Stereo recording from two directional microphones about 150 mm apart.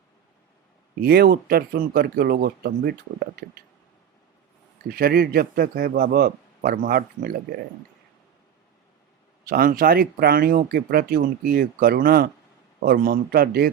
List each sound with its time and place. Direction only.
1.0 s speech: 90° right
4.9 s speech: 90° right
9.5 s speech: 75° right (ahead or behind)